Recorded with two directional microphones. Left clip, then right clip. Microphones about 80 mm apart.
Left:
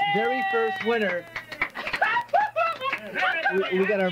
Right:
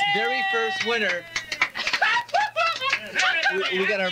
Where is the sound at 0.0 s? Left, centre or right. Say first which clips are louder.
Right 1 dB; left.